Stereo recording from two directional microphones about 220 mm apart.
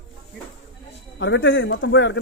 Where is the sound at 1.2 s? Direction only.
55° left (ahead or behind).